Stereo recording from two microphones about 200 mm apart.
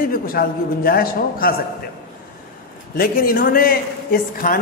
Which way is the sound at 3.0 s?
45° left (ahead or behind).